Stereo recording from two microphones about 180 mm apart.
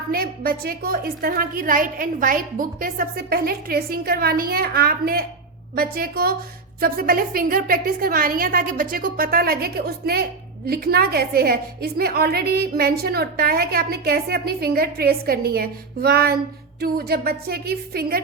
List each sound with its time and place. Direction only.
0.1 s a woman's voice: 55° right (ahead or behind)